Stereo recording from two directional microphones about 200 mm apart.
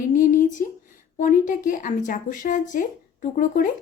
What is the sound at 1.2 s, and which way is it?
A woman's voice, 40° left (ahead or behind).